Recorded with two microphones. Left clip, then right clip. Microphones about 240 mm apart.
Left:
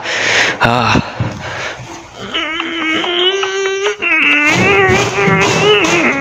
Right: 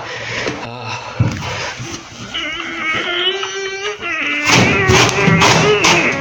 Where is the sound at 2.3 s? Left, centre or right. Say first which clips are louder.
Left 5 dB; left.